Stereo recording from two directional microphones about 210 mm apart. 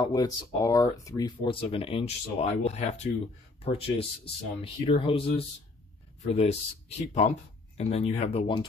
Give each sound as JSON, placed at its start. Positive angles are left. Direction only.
{"t": 0.0, "sound": "speech", "side_deg": 20}
{"t": 6.2, "sound": "speech", "side_deg": 30}